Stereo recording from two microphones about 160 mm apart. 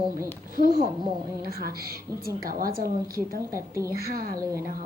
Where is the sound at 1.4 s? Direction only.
70° right (ahead or behind).